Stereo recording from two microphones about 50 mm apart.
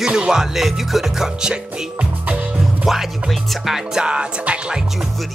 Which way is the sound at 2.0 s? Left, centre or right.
Right.